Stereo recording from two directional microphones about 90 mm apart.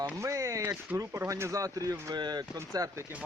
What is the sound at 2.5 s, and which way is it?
Speech, 35° right (ahead or behind).